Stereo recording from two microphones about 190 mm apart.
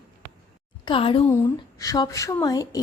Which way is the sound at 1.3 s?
15° left (ahead or behind).